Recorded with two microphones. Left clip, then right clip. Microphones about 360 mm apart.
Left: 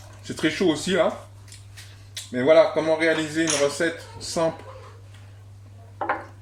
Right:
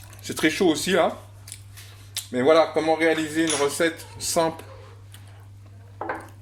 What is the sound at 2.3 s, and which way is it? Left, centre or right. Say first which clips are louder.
Speech: left 1 dB; right.